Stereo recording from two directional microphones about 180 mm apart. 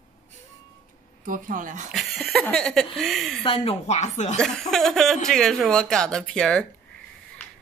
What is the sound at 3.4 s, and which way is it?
Speech, 30° left (ahead or behind).